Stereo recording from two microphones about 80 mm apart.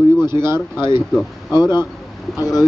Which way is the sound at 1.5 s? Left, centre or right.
Left.